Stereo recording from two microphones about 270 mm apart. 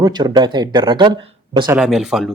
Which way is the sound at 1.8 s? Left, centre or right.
Centre.